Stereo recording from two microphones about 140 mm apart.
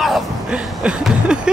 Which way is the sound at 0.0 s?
5° right (ahead or behind).